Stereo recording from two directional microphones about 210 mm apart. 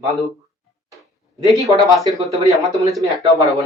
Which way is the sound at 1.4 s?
15° left (ahead or behind).